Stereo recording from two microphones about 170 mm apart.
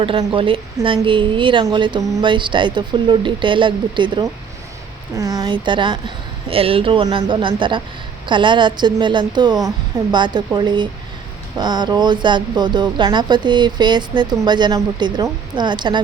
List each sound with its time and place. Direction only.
0.0 s a woman's voice: 30° right (ahead or behind)